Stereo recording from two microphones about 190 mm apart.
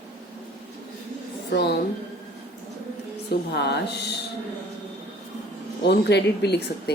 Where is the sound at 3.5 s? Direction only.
60° left (ahead or behind).